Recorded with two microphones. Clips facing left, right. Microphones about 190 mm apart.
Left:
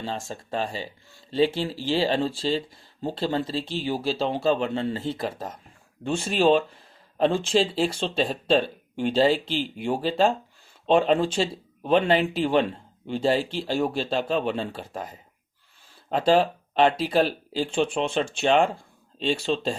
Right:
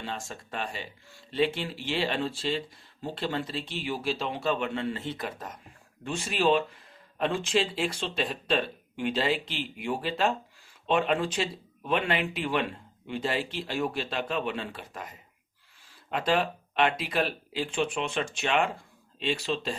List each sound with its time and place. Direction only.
0.0 s speech: 30° left (ahead or behind)